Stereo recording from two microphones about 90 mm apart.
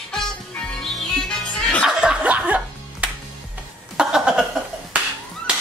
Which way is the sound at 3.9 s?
5° right (ahead or behind).